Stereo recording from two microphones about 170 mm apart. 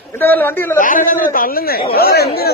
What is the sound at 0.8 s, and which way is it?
A man's voice, 55° left (ahead or behind).